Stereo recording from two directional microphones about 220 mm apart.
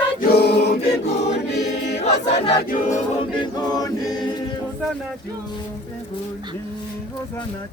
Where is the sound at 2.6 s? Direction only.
40° left (ahead or behind).